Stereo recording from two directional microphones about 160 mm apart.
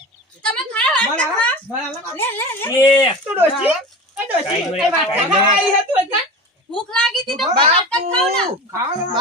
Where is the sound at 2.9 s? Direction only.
30° left (ahead or behind).